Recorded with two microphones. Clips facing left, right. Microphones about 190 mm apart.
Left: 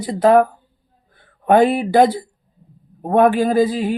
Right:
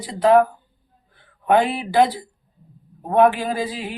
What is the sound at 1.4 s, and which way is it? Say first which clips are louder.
Speech: left 5 dB; 45° left (ahead or behind).